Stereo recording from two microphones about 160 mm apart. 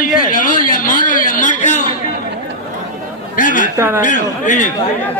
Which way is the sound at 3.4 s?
55° left (ahead or behind).